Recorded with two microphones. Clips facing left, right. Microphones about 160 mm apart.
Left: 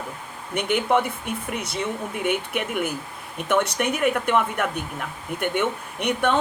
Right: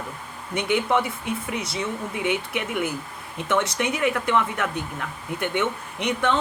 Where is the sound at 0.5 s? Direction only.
55° left (ahead or behind).